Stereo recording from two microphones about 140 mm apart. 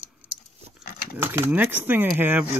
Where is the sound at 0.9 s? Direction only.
90° left.